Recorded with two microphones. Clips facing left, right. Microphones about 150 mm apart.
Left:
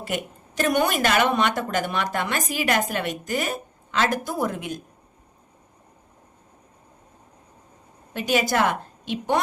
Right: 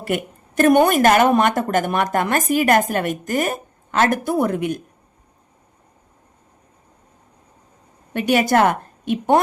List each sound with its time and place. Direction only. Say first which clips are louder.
0.0 s speech: right 6 dB; 55° right (ahead or behind)
8.1 s speech: right 6 dB; 60° right (ahead or behind)